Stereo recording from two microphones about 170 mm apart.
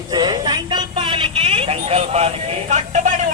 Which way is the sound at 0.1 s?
25° right (ahead or behind).